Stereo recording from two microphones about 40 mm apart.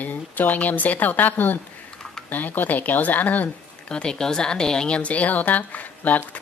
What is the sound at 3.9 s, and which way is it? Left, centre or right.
Speech, left.